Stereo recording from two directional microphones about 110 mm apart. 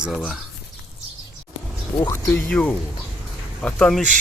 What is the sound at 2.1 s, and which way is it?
Speech, 25° left (ahead or behind).